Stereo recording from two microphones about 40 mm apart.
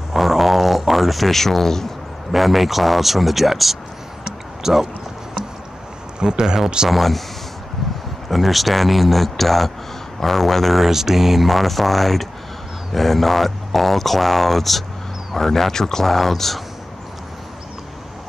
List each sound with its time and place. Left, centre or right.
0.1 s a sound: centre
2.3 s speech: centre
6.1 s speech: centre
6.9 s speech: centre
8.3 s speech: centre
10.9 s speech: centre